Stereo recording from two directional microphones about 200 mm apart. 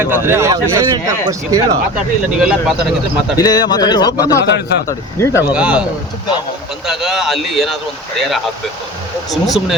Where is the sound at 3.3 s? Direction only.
20° left (ahead or behind).